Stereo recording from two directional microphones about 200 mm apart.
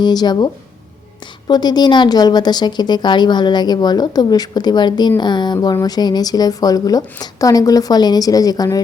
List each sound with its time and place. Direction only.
0.0 s a woman's voice: 20° left (ahead or behind)